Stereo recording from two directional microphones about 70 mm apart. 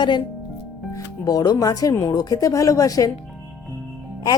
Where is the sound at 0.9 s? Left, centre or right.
Left.